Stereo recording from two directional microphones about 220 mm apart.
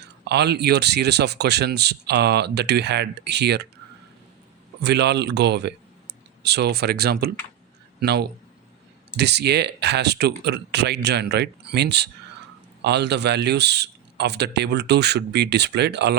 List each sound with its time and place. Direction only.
0.0 s speech: 50° right (ahead or behind)
4.8 s speech: 50° right (ahead or behind)